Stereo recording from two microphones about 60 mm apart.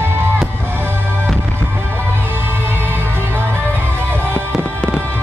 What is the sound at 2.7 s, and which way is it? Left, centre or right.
Music, right.